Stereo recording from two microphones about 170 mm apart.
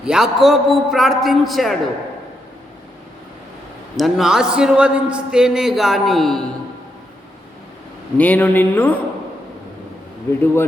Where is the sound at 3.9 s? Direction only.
Centre (ahead or behind).